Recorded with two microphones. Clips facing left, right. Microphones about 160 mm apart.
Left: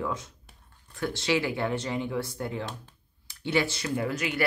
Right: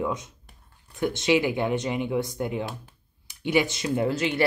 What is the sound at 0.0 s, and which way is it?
Speech, 20° right (ahead or behind).